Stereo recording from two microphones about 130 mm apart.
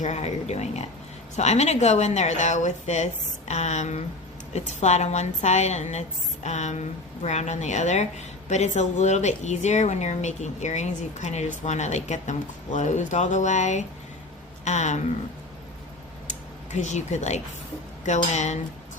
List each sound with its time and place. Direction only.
0.0 s speech: 60° left (ahead or behind)
16.7 s speech: 65° left (ahead or behind)